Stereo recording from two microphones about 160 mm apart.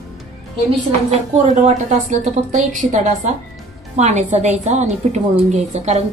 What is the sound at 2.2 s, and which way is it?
A woman's voice, 50° right (ahead or behind).